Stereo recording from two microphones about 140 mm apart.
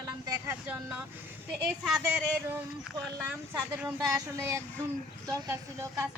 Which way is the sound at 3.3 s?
15° right (ahead or behind).